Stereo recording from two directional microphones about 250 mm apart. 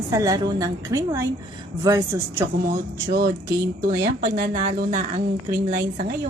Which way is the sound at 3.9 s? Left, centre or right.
Right.